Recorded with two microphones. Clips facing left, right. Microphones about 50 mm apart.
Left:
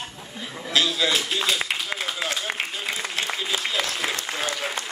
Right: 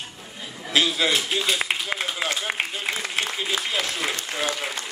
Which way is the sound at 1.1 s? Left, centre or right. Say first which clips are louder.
Even; centre.